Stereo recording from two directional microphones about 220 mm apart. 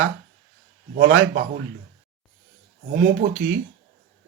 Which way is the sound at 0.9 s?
55° right (ahead or behind).